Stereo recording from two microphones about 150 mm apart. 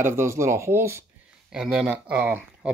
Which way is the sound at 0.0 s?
15° right (ahead or behind).